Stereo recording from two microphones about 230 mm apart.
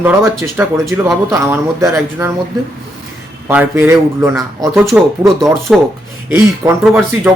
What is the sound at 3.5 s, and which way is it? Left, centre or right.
Speech, centre.